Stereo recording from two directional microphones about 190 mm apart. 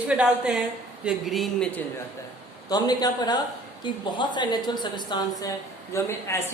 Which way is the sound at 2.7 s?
20° left (ahead or behind).